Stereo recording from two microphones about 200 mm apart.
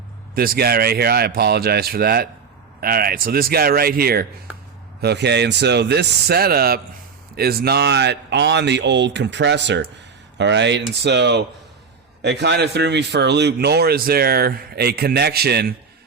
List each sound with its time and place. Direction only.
0.3 s a man's voice: 50° right (ahead or behind)